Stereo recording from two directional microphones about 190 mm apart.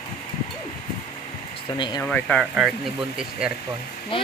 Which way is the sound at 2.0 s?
10° left (ahead or behind).